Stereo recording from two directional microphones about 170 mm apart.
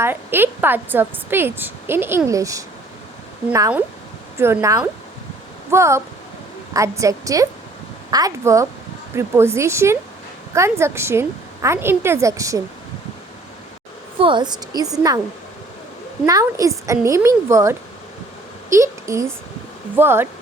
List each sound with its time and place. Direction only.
0.0 s a woman's voice: 10° right (ahead or behind)
4.4 s a woman's voice: 15° right (ahead or behind)
14.2 s a woman's voice: 30° right (ahead or behind)
16.2 s a woman's voice: 20° right (ahead or behind)